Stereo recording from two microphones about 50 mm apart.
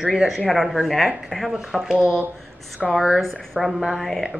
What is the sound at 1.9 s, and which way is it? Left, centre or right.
Speech, right.